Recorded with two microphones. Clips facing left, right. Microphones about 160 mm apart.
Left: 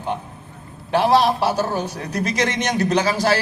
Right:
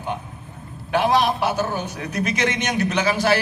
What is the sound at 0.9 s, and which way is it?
A man's voice, 35° left (ahead or behind).